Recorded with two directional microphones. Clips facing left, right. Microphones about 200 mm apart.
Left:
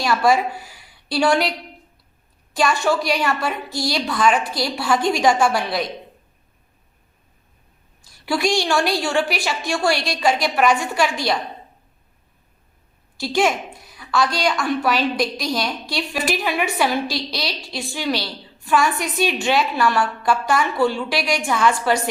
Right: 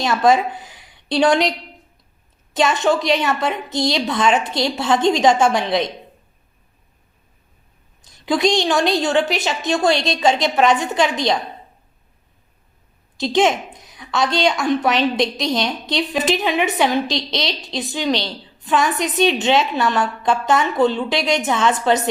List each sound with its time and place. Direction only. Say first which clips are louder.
0.0 s a woman's voice: right 2 dB; 20° right (ahead or behind)
8.0 s a woman's voice: right 3 dB; 20° right (ahead or behind)
13.1 s a woman's voice: right 3 dB; 20° right (ahead or behind)